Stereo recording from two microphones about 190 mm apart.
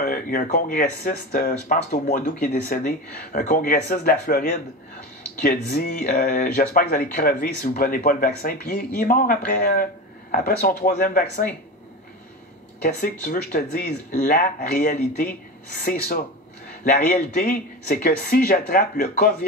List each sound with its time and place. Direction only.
0.0 s speech: 50° left (ahead or behind)
1.9 s speech: 40° left (ahead or behind)
12.8 s speech: 45° left (ahead or behind)